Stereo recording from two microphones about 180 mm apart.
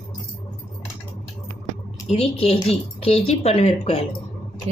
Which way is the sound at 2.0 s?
35° left (ahead or behind).